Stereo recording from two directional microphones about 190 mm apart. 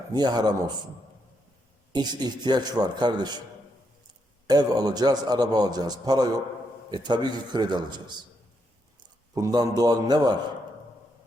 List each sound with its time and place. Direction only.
0.1 s a man's voice: 20° right (ahead or behind)
1.9 s a man's voice: 20° right (ahead or behind)
4.4 s a man's voice: 20° right (ahead or behind)
9.3 s a man's voice: 20° right (ahead or behind)